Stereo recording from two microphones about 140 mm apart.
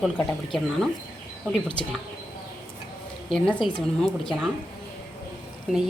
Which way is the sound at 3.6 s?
35° left (ahead or behind).